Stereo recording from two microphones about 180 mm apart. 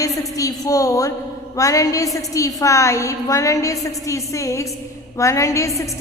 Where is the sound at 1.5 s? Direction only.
20° left (ahead or behind).